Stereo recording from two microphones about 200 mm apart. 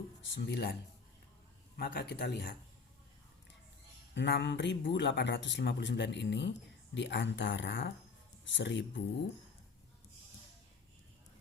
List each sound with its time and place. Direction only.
0.3 s speech: 60° left (ahead or behind)
4.1 s speech: 60° left (ahead or behind)